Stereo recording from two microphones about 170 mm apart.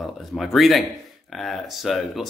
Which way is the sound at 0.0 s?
Centre (ahead or behind).